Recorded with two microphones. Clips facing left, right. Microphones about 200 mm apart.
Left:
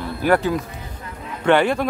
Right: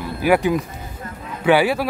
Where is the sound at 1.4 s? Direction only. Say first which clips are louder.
Right 1 dB; 5° right (ahead or behind).